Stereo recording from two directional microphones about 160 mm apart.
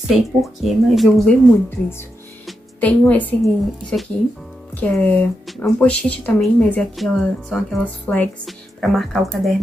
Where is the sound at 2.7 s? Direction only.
10° left (ahead or behind).